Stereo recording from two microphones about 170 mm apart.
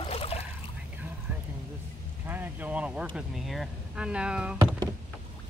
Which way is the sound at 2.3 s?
10° right (ahead or behind).